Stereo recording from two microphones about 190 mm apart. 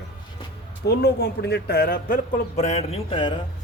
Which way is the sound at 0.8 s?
60° left (ahead or behind).